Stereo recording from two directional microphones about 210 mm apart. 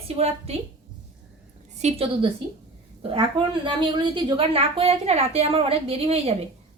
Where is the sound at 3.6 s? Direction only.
20° right (ahead or behind).